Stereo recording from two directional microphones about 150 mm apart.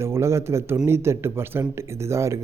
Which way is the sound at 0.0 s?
15° right (ahead or behind).